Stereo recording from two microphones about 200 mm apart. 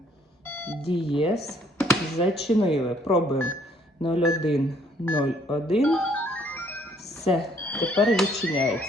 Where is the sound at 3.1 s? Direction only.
30° left (ahead or behind).